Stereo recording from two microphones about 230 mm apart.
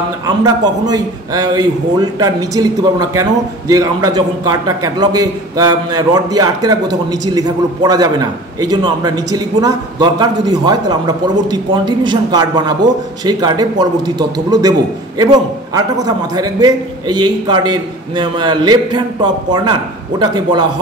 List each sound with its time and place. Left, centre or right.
0.4 s a man's voice: centre